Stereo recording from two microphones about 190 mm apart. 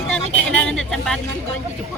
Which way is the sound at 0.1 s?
5° left (ahead or behind).